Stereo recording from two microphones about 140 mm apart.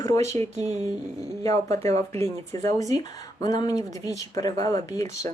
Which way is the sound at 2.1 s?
50° right (ahead or behind).